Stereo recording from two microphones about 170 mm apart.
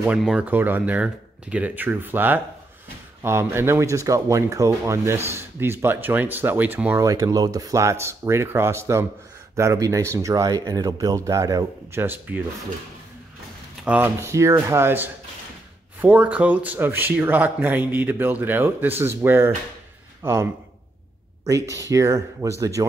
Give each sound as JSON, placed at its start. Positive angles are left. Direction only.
{"t": 0.0, "sound": "speech", "side_deg": -5}
{"t": 13.8, "sound": "a man's voice", "side_deg": -10}
{"t": 21.5, "sound": "speech", "side_deg": -20}